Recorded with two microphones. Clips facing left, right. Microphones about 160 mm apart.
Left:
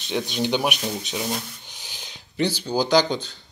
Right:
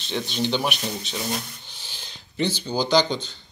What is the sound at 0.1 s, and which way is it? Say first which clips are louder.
Speech: left 1 dB; 10° left (ahead or behind).